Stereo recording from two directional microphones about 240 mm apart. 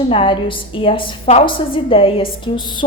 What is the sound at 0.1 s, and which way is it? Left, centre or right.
A woman's voice, left.